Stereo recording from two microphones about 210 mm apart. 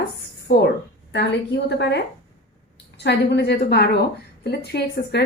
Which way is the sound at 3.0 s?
55° left (ahead or behind).